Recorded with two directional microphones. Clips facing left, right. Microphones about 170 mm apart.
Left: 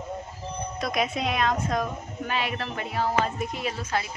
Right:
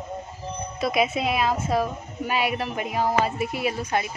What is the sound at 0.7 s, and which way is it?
A woman's voice, 5° right (ahead or behind).